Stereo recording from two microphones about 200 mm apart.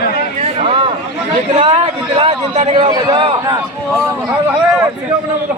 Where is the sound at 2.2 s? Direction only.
30° right (ahead or behind).